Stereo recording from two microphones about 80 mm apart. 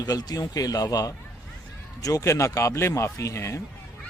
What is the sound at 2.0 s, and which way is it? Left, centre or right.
Speech, left.